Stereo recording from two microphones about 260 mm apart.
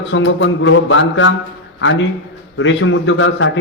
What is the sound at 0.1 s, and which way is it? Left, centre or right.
A man's voice, left.